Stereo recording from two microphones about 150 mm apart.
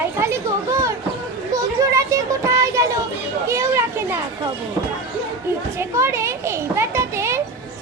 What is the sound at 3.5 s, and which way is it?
Children playing, 20° right (ahead or behind).